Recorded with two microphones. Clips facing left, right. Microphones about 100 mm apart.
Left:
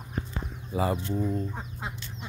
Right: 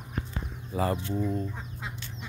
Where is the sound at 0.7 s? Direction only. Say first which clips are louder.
Left 1 dB; 10° left (ahead or behind).